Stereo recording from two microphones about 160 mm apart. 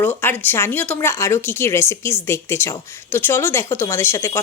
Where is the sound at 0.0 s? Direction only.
10° left (ahead or behind).